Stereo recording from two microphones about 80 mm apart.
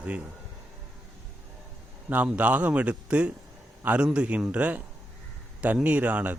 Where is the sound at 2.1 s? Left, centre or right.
Centre.